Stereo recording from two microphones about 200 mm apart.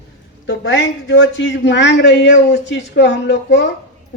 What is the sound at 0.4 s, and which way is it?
A man's voice, 70° left (ahead or behind).